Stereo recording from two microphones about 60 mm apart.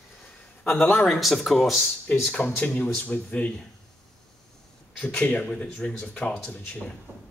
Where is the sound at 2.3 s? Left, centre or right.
Centre.